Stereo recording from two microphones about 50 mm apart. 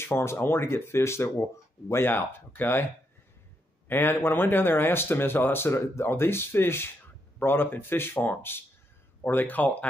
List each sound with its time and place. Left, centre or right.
0.0 s speech: left
2.0 s speech: left
3.9 s speech: left